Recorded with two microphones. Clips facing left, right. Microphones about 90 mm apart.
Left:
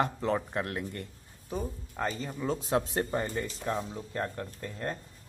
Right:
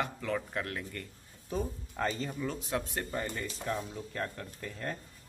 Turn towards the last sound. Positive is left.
turn(degrees=25)  # may be behind; listen again after turning